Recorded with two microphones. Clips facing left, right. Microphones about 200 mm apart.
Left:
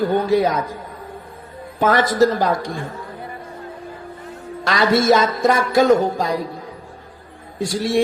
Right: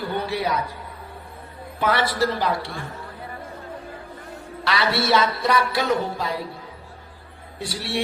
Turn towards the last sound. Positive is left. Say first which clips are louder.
# left 9 dB
turn(degrees=45)  # may be behind; listen again after turning